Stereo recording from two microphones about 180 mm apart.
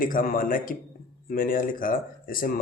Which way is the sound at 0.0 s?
50° left (ahead or behind).